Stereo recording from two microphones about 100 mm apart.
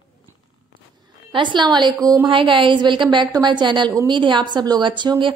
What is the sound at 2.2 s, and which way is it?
A woman's voice, 55° right (ahead or behind).